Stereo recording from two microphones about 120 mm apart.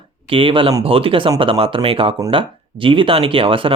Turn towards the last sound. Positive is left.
turn(degrees=-50)  # may be behind; listen again after turning